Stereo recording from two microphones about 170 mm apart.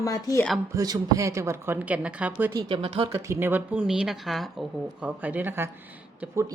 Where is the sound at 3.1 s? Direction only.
15° right (ahead or behind).